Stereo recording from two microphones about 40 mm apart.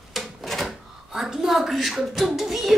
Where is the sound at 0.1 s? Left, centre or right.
Centre.